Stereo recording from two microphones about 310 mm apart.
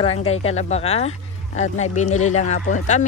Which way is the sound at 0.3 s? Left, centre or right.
Centre.